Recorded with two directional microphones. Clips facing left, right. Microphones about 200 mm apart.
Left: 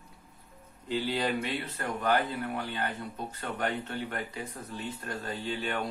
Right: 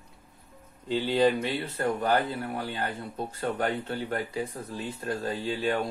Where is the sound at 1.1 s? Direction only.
25° right (ahead or behind).